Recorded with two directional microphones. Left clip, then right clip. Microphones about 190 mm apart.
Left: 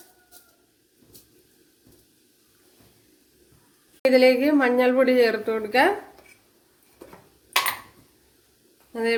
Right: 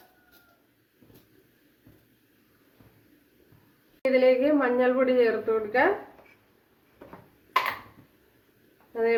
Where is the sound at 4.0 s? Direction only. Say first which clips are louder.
Left 4 dB; 50° left (ahead or behind).